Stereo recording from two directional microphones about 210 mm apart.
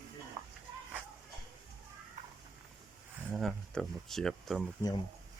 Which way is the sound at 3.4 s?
Centre (ahead or behind).